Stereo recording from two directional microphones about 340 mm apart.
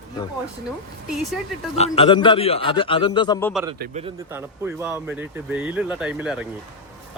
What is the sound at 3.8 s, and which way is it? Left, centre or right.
Speech, centre.